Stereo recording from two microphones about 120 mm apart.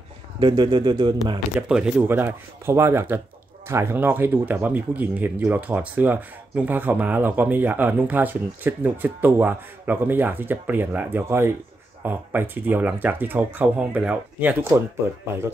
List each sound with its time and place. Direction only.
0.4 s a man's voice: 40° right (ahead or behind)
1.7 s speech: 10° right (ahead or behind)